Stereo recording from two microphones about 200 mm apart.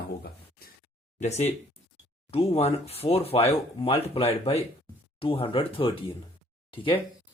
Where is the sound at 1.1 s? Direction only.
35° left (ahead or behind).